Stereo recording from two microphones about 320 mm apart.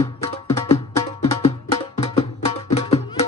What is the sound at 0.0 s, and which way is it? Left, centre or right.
Music, centre.